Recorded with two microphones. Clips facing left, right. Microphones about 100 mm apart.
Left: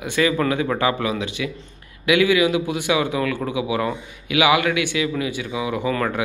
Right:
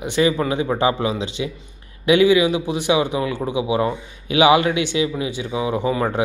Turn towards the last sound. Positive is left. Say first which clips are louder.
# right 2 dB
turn(degrees=-25)  # may be behind; listen again after turning